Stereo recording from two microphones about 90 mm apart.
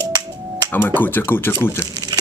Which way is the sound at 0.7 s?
25° left (ahead or behind).